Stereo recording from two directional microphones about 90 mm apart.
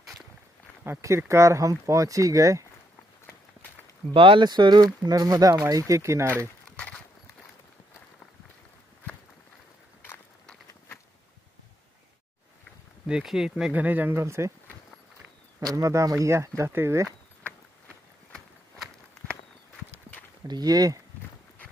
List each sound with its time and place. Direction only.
0.8 s speech: 30° right (ahead or behind)
4.1 s speech: 75° right (ahead or behind)
4.5 s speech: 50° right (ahead or behind); by 6.3 s 30° right (ahead or behind)
13.0 s speech: 5° right (ahead or behind)
13.7 s speech: 20° right (ahead or behind)
14.2 s speech: 30° right (ahead or behind)
15.6 s speech: 40° right (ahead or behind)
18.3 s walk: 5° left (ahead or behind)
20.4 s speech: 45° right (ahead or behind)